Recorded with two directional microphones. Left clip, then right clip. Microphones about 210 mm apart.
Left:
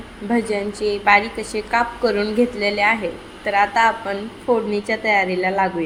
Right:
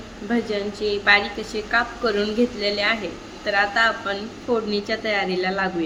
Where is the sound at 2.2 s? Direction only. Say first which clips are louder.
Left 3 dB; 5° right (ahead or behind).